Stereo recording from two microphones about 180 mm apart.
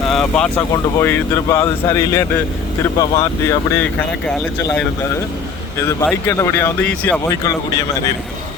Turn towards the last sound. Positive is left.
turn(degrees=20)  # may be behind; listen again after turning